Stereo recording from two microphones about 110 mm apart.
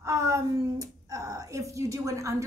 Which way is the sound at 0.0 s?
25° right (ahead or behind).